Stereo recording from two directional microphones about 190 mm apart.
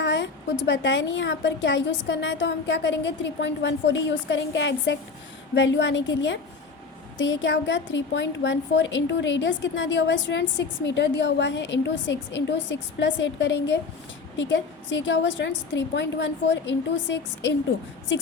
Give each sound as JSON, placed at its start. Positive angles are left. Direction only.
{"t": 0.0, "sound": "a woman's voice", "side_deg": 70}